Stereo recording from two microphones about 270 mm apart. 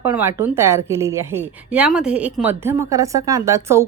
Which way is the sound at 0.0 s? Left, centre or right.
Centre.